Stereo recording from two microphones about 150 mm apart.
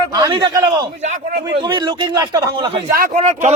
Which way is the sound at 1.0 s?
50° right (ahead or behind).